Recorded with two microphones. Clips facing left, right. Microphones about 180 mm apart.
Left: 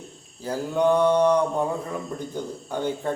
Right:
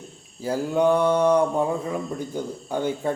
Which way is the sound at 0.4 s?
10° right (ahead or behind).